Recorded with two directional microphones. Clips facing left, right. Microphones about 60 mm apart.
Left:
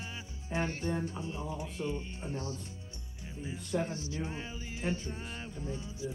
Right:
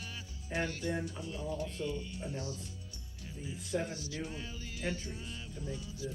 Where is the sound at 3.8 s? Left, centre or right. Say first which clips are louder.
Left 3 dB; left.